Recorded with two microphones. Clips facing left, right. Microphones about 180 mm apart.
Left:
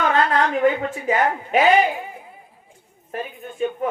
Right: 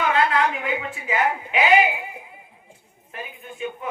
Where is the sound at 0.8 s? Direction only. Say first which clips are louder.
Left 4 dB; 45° left (ahead or behind).